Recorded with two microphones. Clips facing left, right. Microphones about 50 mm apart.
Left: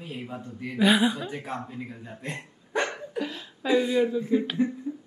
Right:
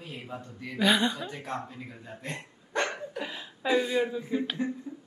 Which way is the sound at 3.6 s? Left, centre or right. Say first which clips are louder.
Left 3 dB; centre.